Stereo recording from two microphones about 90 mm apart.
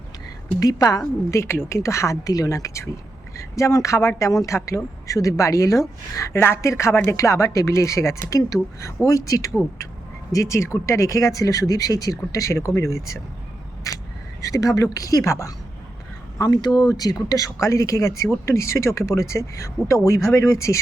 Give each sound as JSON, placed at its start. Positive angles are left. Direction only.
{"t": 0.6, "sound": "a woman's voice", "side_deg": 45}
{"t": 13.9, "sound": "single-lens reflex camera", "side_deg": 40}
{"t": 14.4, "sound": "a woman's voice", "side_deg": 40}
{"t": 16.4, "sound": "a woman's voice", "side_deg": 50}